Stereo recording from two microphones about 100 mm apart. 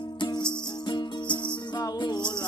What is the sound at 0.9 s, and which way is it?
Music, 50° left (ahead or behind).